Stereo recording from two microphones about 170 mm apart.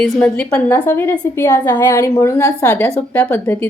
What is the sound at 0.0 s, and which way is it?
A woman's voice, 5° left (ahead or behind).